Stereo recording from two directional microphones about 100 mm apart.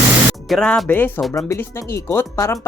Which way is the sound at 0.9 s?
20° left (ahead or behind).